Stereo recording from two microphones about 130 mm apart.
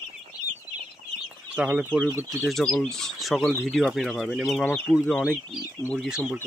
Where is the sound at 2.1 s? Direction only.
20° right (ahead or behind).